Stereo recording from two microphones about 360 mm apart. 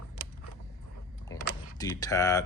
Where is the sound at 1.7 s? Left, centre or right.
Centre.